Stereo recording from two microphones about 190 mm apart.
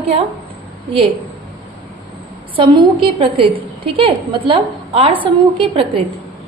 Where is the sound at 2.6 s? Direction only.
25° right (ahead or behind).